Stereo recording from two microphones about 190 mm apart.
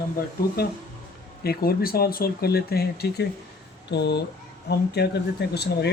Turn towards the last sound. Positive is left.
turn(degrees=60)  # may be behind; listen again after turning